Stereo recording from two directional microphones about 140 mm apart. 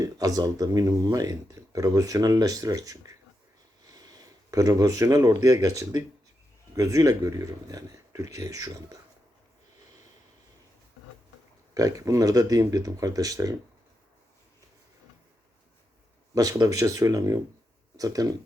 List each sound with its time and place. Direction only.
0.0 s speech: 25° right (ahead or behind)
3.8 s sniff: 25° right (ahead or behind)
4.5 s speech: 25° right (ahead or behind)
11.7 s speech: 25° right (ahead or behind)
16.3 s speech: 25° right (ahead or behind)